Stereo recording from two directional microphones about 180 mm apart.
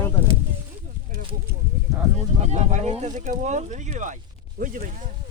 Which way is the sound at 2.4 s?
40° right (ahead or behind).